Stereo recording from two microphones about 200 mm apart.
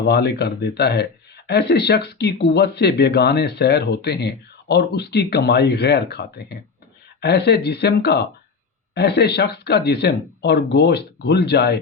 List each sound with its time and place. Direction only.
0.0 s speech: 55° left (ahead or behind)